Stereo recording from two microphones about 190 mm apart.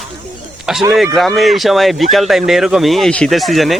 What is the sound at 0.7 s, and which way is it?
Speech, 5° right (ahead or behind).